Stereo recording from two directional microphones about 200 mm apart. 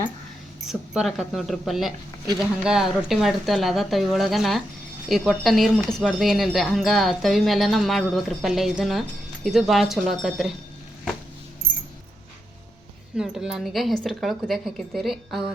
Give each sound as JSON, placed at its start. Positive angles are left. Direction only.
{"t": 0.7, "sound": "speech", "side_deg": 0}
{"t": 11.6, "sound": "a sound", "side_deg": -50}
{"t": 13.1, "sound": "speech", "side_deg": -5}